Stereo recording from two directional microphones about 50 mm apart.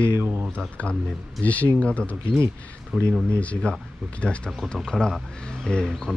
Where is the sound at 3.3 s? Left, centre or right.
Left.